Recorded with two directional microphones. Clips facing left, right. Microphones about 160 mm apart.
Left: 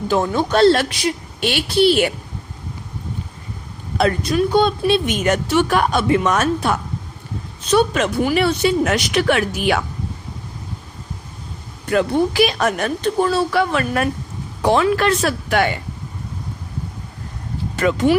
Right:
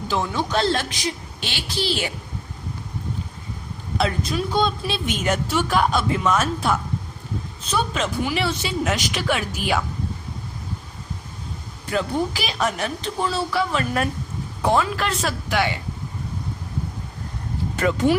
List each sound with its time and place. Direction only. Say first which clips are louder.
0.1 s speech: left 5 dB; 50° left (ahead or behind)
3.9 s a woman's voice: left 6 dB; 60° left (ahead or behind)
8.2 s speech: left 10 dB; 50° left (ahead or behind)
11.9 s speech: left 6 dB; 60° left (ahead or behind)
14.6 s speech: left 5 dB; 80° left; by 15.8 s 55° left (ahead or behind)
17.7 s speech: left 4 dB; 90° left